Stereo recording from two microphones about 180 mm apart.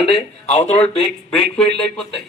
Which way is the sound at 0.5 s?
35° left (ahead or behind).